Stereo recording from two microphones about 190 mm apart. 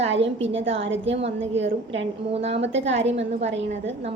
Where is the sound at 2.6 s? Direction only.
70° right (ahead or behind).